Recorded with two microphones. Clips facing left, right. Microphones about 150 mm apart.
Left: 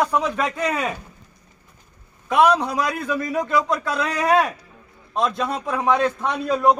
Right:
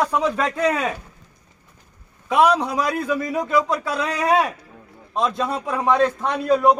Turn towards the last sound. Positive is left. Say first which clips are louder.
# right 2 dB
turn(degrees=0)  # may be behind; listen again after turning